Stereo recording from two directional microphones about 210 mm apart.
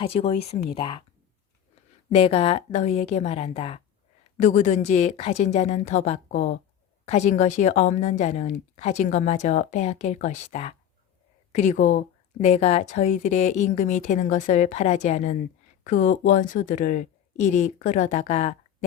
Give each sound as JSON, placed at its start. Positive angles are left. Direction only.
{"t": 0.0, "sound": "a woman's voice", "side_deg": 30}
{"t": 2.1, "sound": "a woman's voice", "side_deg": 30}